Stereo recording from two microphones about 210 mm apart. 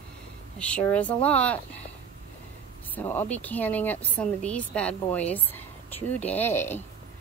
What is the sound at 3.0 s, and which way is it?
A woman's voice, 10° left (ahead or behind).